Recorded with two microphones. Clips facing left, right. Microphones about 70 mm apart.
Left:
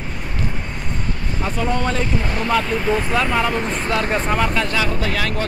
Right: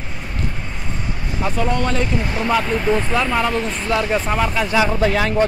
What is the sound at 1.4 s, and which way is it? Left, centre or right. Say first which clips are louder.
Speech: right 1 dB; centre.